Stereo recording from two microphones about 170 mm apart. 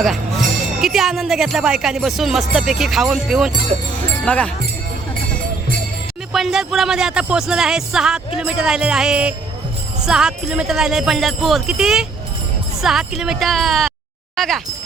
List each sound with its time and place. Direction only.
0.8 s speech: centre (ahead or behind)
3.7 s speech: 40° right (ahead or behind)
4.3 s speech: 10° left (ahead or behind)
6.3 s speech: centre (ahead or behind)